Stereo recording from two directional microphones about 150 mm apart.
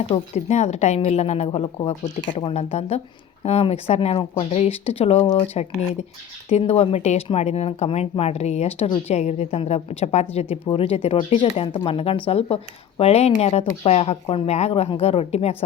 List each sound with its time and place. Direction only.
0.1 s a woman's voice: 45° left (ahead or behind)
6.5 s a woman's voice: 45° left (ahead or behind)